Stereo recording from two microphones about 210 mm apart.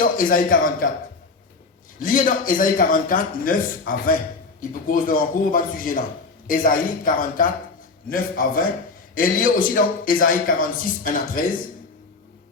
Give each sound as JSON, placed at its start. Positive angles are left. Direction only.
{"t": 0.0, "sound": "a man's voice", "side_deg": 40}
{"t": 2.0, "sound": "a man's voice", "side_deg": 40}